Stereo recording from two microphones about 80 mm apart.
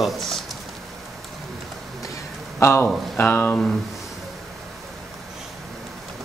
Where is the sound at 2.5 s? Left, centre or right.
Left.